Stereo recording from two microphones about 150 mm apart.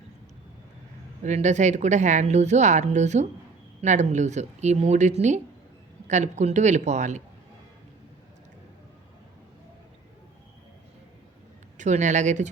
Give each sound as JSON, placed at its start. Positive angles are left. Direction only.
{"t": 1.2, "sound": "a woman's voice", "side_deg": -50}
{"t": 11.8, "sound": "a woman's voice", "side_deg": -55}